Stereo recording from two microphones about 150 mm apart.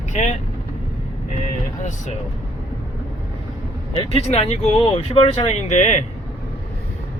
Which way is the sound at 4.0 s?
40° left (ahead or behind).